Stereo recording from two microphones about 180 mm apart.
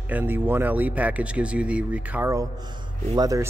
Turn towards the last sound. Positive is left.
turn(degrees=-20)  # may be behind; listen again after turning